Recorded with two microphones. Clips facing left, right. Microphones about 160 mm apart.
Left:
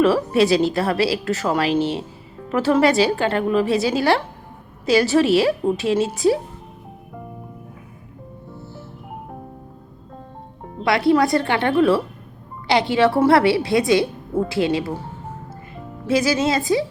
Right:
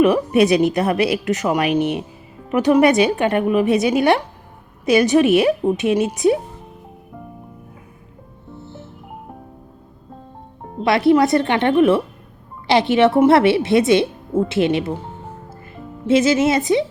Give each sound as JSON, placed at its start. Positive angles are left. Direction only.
{"t": 0.3, "sound": "a woman's voice", "side_deg": -20}
{"t": 10.8, "sound": "a woman's voice", "side_deg": -20}
{"t": 16.0, "sound": "a woman's voice", "side_deg": -25}